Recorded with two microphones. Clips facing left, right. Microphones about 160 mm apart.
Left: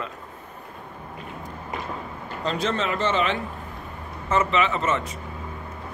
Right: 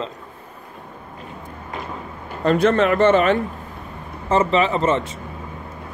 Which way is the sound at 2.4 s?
55° right (ahead or behind).